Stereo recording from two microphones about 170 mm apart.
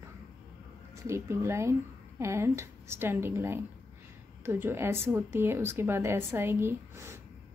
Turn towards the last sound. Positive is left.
turn(degrees=-15)  # may be behind; listen again after turning